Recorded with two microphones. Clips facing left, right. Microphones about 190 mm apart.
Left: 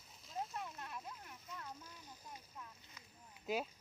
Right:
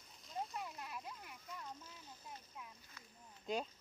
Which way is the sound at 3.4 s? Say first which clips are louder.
Left 1 dB; 5° left (ahead or behind).